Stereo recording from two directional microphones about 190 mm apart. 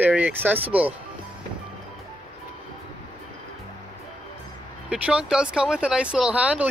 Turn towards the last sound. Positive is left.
turn(degrees=-5)  # may be behind; listen again after turning